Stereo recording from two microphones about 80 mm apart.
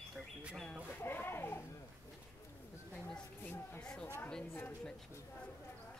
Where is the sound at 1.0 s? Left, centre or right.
Left.